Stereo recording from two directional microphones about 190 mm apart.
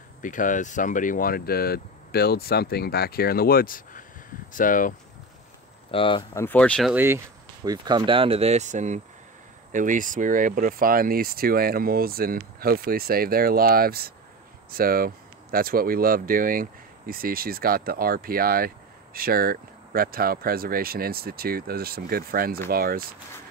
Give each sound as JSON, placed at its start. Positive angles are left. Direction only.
{"t": 0.2, "sound": "speech", "side_deg": 45}
{"t": 5.9, "sound": "speech", "side_deg": 25}
{"t": 6.3, "sound": "speech", "side_deg": 10}
{"t": 6.9, "sound": "speech", "side_deg": -10}
{"t": 7.6, "sound": "speech", "side_deg": -20}